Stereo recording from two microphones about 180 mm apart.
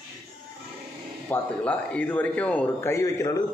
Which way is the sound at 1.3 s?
10° left (ahead or behind).